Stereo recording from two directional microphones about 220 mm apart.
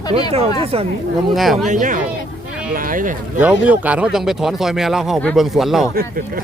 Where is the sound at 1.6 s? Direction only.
35° right (ahead or behind).